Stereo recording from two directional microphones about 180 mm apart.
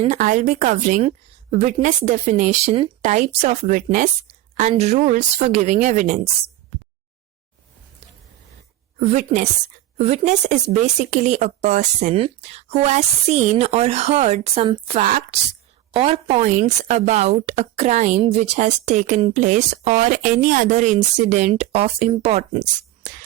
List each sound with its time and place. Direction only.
0.1 s speech: 45° right (ahead or behind)
9.0 s speech: 40° right (ahead or behind)
15.0 s speech: 45° right (ahead or behind)
15.9 s speech: 30° right (ahead or behind)